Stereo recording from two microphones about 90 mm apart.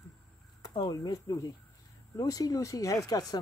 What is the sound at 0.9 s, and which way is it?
Speech, 45° left (ahead or behind).